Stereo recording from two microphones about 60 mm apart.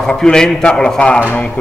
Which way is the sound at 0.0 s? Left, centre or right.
Centre.